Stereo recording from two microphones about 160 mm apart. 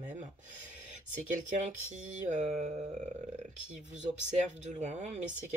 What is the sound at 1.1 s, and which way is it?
Speech, 50° right (ahead or behind).